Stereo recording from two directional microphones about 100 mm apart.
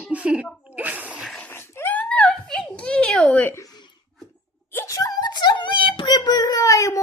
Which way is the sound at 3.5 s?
40° left (ahead or behind).